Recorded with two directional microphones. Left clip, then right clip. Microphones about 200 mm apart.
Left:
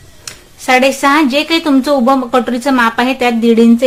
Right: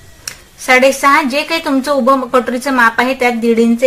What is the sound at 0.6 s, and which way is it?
A woman's voice, 20° left (ahead or behind).